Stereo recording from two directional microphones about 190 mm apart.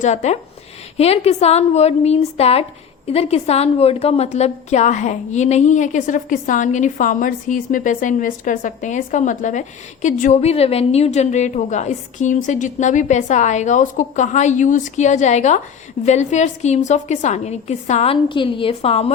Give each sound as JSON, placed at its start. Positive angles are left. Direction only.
{"t": 0.0, "sound": "a woman's voice", "side_deg": 35}